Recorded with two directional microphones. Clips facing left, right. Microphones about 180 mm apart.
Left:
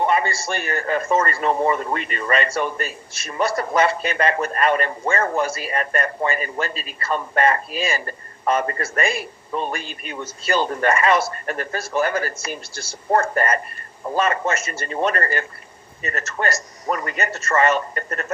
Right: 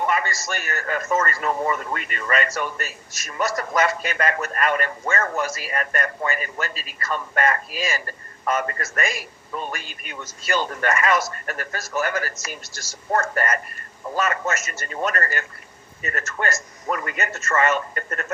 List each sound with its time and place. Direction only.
0.0 s a man's voice: 30° left (ahead or behind)